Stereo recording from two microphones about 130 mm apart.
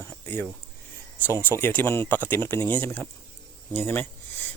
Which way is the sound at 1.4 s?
15° left (ahead or behind).